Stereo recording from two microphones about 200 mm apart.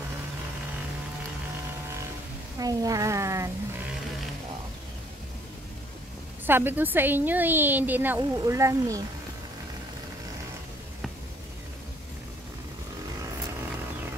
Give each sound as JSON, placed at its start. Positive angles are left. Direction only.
{"t": 2.6, "sound": "speech", "side_deg": -15}
{"t": 6.4, "sound": "a woman's voice", "side_deg": -10}